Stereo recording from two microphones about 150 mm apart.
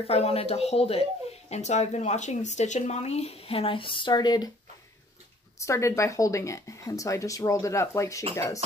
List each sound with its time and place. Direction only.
0.0 s speech: 40° left (ahead or behind); by 4.5 s 25° left (ahead or behind)
5.6 s speech: 20° left (ahead or behind)